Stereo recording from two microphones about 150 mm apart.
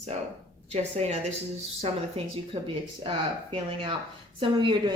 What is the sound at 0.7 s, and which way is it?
A woman's voice, 45° right (ahead or behind).